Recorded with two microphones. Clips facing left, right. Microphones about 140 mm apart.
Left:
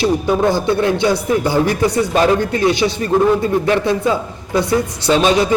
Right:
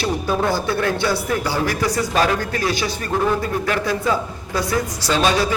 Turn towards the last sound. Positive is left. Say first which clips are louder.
# left 5 dB
turn(degrees=20)  # may be behind; listen again after turning